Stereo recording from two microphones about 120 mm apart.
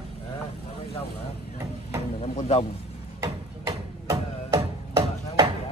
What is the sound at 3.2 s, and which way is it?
Music, 25° right (ahead or behind).